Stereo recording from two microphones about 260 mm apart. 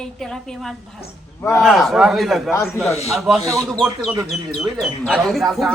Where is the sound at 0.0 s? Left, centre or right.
Centre.